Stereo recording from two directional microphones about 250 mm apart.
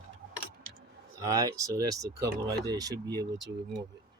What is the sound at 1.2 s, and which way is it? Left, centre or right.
Speech, centre.